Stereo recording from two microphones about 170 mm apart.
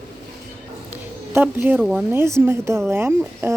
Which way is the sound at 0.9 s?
10° right (ahead or behind).